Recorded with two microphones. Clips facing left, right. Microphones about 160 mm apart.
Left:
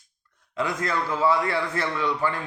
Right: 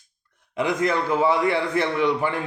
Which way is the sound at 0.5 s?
20° right (ahead or behind).